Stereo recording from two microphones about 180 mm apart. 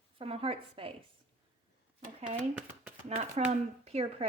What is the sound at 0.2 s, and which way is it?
Speech, 30° right (ahead or behind).